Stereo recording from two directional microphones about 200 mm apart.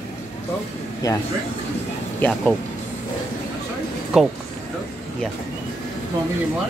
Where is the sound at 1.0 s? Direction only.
20° left (ahead or behind).